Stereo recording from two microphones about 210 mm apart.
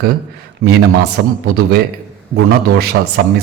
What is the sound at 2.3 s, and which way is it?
Speech, 50° right (ahead or behind).